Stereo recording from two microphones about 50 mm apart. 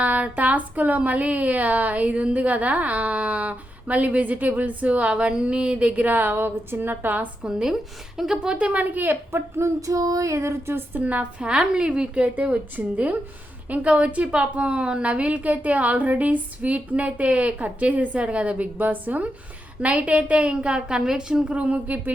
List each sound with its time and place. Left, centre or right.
0.0 s speech: right
6.1 s a woman's voice: right
7.4 s speech: centre
8.4 s speech: right
9.3 s a sound: right
11.0 s speech: right
11.5 s speech: centre
12.4 s speech: right; by 21.3 s centre
21.5 s speech: right